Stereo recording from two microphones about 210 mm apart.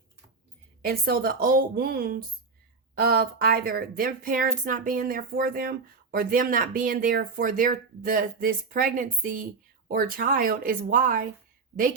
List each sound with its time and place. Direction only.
0.8 s speech: 45° right (ahead or behind)